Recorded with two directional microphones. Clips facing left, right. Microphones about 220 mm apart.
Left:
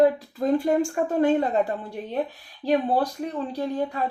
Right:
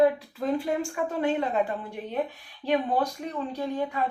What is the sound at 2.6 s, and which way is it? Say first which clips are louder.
Speech: left 3 dB; 35° left (ahead or behind).